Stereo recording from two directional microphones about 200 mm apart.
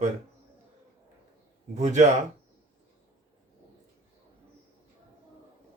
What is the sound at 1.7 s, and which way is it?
Speech, 35° right (ahead or behind).